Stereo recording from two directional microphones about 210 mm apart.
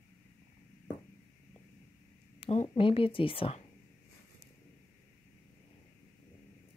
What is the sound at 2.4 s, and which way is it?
Speech, 30° left (ahead or behind).